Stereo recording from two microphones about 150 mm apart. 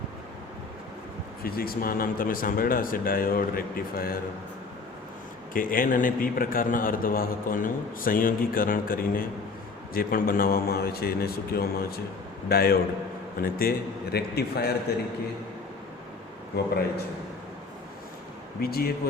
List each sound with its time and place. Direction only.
1.5 s a man's voice: 85° left
5.5 s a man's voice: 65° left (ahead or behind); by 14.8 s 90° left
18.6 s a man's voice: 90° left